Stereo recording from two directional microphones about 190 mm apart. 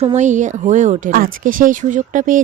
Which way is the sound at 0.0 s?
35° right (ahead or behind).